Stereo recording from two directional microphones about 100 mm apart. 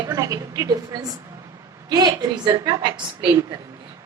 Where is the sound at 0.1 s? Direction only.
35° right (ahead or behind); by 3.2 s 50° right (ahead or behind).